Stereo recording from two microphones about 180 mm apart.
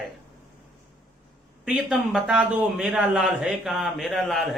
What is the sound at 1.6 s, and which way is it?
A man's voice, 5° right (ahead or behind).